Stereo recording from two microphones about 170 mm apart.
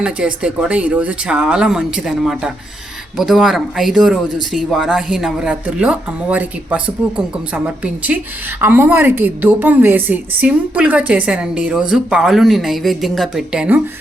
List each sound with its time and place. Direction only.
0.0 s speech: 5° right (ahead or behind)